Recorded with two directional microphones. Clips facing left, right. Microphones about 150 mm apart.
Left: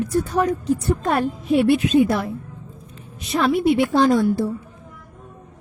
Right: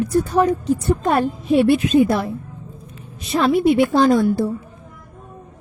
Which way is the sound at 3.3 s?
30° right (ahead or behind).